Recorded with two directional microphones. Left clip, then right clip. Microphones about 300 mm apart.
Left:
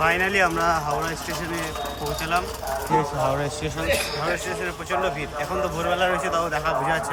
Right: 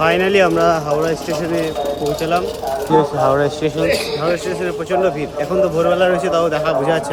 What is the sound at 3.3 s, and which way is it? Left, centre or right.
Speech, right.